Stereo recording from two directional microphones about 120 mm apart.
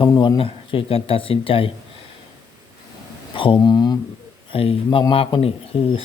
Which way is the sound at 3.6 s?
35° left (ahead or behind).